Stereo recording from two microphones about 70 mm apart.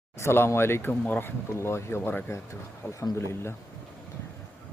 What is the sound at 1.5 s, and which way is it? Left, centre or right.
Speech, left.